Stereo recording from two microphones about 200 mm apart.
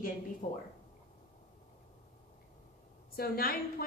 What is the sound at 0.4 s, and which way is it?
Speech, 45° left (ahead or behind).